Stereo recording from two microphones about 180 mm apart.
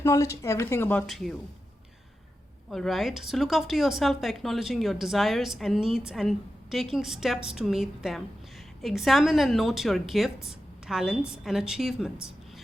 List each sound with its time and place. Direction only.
0.0 s a woman's voice: 15° left (ahead or behind); by 1.3 s centre (ahead or behind)
2.6 s a woman's voice: centre (ahead or behind)